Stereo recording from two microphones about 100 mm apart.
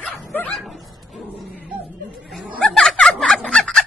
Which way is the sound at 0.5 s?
Centre (ahead or behind).